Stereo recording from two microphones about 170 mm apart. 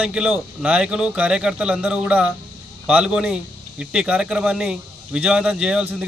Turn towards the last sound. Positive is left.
turn(degrees=-5)  # may be behind; listen again after turning